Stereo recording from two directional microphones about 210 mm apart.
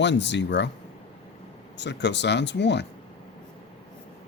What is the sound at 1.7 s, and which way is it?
Speech, 55° left (ahead or behind).